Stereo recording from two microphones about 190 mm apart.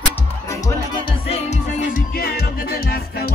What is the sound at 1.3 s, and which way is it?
Music, 35° left (ahead or behind).